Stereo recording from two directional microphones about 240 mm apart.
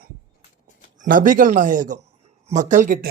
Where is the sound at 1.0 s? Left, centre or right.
Right.